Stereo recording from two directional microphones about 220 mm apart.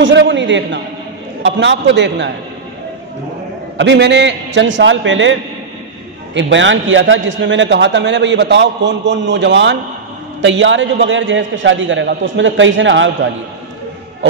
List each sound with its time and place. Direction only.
0.0 s a man's voice: 55° right (ahead or behind)
3.7 s a man's voice: 50° right (ahead or behind)